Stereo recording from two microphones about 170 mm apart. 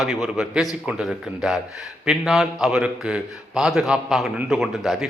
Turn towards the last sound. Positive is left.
turn(degrees=0)  # may be behind; listen again after turning